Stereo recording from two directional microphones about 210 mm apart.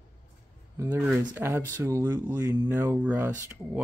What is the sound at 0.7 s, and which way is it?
Speech, 10° right (ahead or behind).